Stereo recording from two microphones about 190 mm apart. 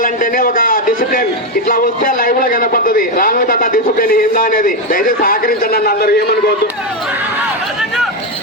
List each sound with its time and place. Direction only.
0.0 s a man's voice: 45° left (ahead or behind)